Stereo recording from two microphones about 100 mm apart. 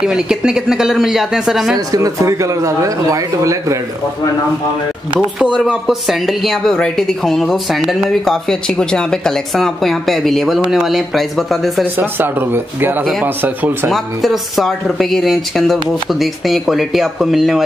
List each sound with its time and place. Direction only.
0.0 s speech: 5° right (ahead or behind)
1.9 s speech: 35° right (ahead or behind)
5.4 s speech: 10° right (ahead or behind)
11.8 s speech: 20° right (ahead or behind)
13.8 s speech: centre (ahead or behind)